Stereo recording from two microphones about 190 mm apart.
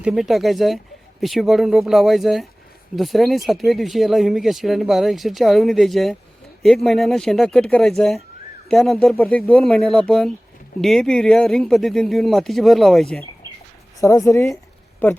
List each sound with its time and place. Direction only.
0.0 s speech: centre (ahead or behind)
14.0 s a woman's voice: 15° left (ahead or behind)